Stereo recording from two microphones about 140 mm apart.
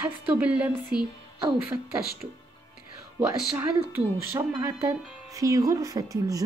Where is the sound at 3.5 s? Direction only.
20° right (ahead or behind).